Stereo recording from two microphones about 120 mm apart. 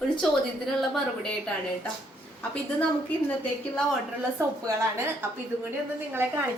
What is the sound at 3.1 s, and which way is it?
Speech, 15° left (ahead or behind).